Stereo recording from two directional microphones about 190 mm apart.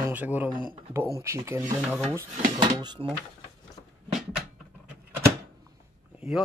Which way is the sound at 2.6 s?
25° right (ahead or behind).